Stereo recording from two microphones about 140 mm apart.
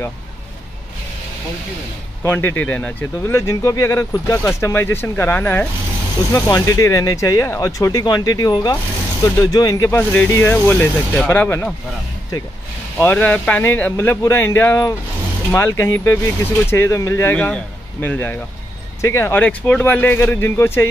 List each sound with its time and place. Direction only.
2.2 s speech: 15° left (ahead or behind)
3.3 s speech: 20° left (ahead or behind)
13.0 s speech: 10° left (ahead or behind)